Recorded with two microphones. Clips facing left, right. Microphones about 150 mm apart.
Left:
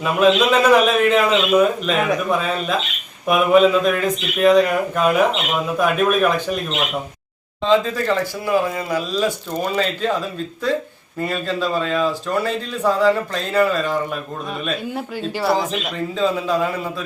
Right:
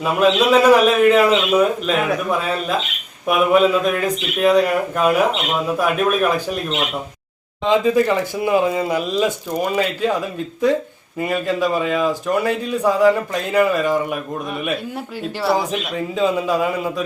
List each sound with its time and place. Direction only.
0.5 s a man's voice: centre (ahead or behind)
7.6 s speech: 15° right (ahead or behind)
14.9 s speech: centre (ahead or behind)